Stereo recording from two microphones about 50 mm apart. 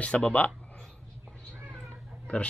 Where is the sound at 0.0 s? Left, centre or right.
Left.